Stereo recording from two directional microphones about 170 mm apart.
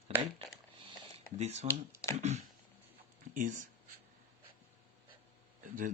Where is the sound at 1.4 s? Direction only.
40° right (ahead or behind).